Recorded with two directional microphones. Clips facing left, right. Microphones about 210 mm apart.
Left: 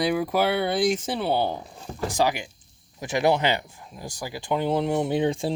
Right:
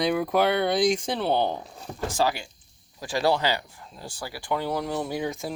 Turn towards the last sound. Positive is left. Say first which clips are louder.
# left 6 dB
turn(degrees=30)  # may be behind; listen again after turning